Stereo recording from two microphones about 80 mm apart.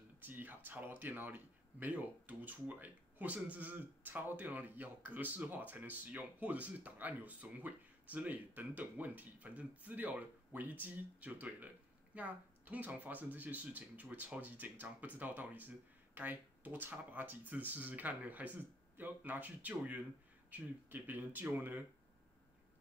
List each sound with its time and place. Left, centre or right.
0.2 s speech: right